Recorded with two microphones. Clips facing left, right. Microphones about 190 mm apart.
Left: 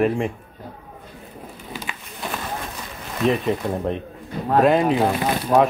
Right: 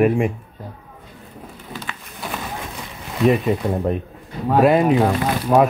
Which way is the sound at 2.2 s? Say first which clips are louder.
Even; centre (ahead or behind).